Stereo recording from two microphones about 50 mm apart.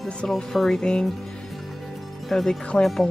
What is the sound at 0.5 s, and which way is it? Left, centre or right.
Speech, centre.